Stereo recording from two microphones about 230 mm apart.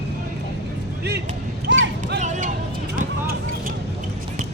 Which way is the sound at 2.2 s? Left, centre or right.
Right.